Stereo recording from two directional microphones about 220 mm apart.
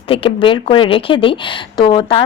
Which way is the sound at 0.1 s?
20° left (ahead or behind).